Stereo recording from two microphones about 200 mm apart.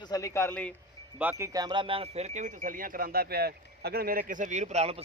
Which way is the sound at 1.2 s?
10° right (ahead or behind).